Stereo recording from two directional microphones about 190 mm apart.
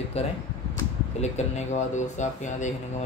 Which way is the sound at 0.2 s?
30° left (ahead or behind).